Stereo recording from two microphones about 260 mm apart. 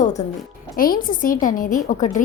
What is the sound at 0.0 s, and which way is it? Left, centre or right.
A woman's voice, left.